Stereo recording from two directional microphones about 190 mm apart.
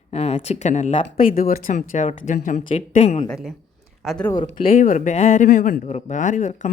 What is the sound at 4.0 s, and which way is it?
Speech, centre (ahead or behind).